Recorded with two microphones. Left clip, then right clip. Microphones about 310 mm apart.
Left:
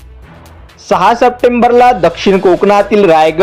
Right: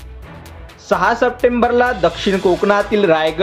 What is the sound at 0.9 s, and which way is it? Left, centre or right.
Speech, centre.